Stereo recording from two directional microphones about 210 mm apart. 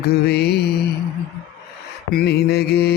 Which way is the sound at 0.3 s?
50° left (ahead or behind).